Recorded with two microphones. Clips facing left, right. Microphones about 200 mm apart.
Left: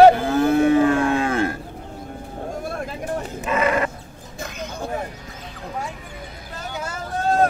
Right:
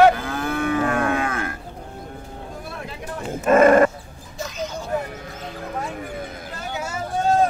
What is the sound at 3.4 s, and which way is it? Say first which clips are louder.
Dog: right 9 dB; 50° right (ahead or behind).